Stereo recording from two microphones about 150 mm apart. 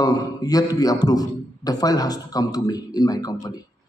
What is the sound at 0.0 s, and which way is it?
A man's voice, 25° left (ahead or behind).